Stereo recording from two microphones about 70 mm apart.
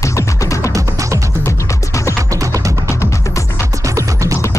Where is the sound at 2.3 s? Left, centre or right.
Right.